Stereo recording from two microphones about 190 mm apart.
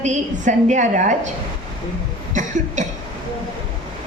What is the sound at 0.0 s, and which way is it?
A woman's voice, 40° right (ahead or behind).